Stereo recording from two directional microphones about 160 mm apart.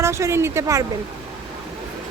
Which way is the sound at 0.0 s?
15° right (ahead or behind).